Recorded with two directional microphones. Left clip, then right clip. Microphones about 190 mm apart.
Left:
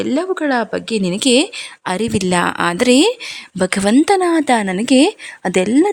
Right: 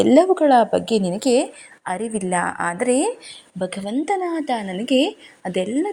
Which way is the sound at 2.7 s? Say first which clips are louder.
Left 8 dB; 65° left (ahead or behind).